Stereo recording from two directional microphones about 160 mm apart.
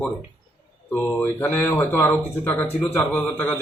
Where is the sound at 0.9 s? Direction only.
10° left (ahead or behind).